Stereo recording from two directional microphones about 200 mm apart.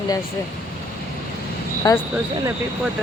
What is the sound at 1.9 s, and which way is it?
Speech, 20° left (ahead or behind).